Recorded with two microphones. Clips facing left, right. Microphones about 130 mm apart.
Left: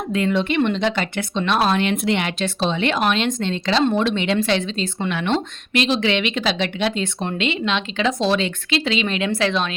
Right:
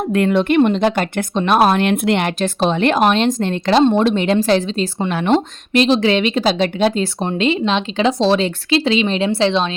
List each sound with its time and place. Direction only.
0.1 s speech: 55° right (ahead or behind); by 9.7 s 30° right (ahead or behind)